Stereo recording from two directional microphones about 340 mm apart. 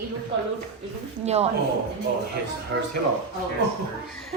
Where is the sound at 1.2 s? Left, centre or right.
Centre.